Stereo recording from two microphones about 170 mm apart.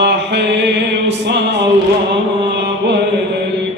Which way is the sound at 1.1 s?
90° right.